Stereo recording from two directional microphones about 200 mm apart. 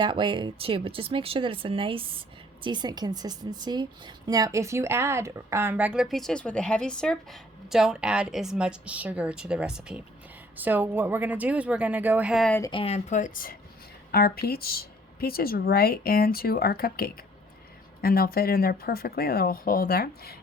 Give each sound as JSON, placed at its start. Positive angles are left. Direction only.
{"t": 0.0, "sound": "speech", "side_deg": -25}
{"t": 12.7, "sound": "speech", "side_deg": 30}